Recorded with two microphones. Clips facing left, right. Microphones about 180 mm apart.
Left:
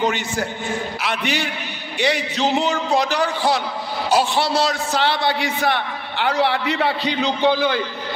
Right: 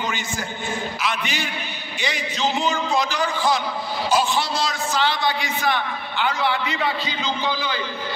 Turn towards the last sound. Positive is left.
turn(degrees=60)  # may be behind; listen again after turning